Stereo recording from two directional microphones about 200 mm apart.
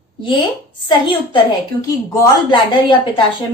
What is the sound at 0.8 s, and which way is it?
A woman's voice, 25° left (ahead or behind).